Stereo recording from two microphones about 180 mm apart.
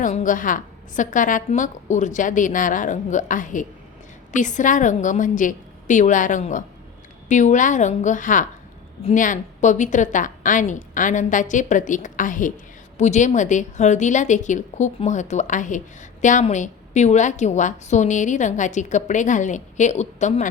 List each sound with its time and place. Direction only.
0.0 s a woman's voice: 45° left (ahead or behind)